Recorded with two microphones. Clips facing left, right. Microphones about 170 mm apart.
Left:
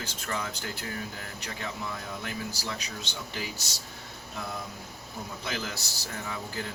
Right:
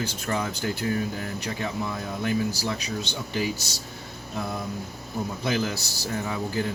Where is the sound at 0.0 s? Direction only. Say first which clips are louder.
Right 7 dB; 30° right (ahead or behind).